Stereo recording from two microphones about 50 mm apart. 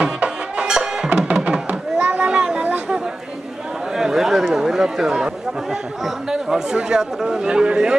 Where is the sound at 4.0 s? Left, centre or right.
Centre.